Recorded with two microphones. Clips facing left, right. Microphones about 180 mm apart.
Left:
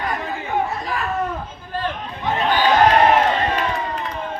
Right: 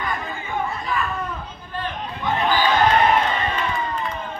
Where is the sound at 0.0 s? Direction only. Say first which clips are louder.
Left 3 dB; 75° left (ahead or behind).